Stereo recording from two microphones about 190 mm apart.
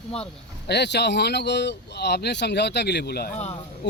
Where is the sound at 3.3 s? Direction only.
35° left (ahead or behind).